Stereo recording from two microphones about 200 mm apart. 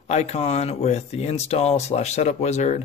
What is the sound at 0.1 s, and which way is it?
Speech, 30° left (ahead or behind).